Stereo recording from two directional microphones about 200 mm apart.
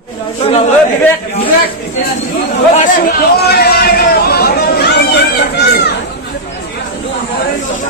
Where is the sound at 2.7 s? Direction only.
40° left (ahead or behind).